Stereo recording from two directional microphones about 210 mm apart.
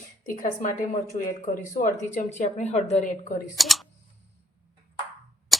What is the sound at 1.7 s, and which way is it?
A woman's voice, 35° left (ahead or behind).